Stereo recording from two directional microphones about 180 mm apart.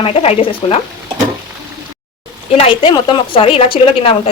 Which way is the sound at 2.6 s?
30° left (ahead or behind).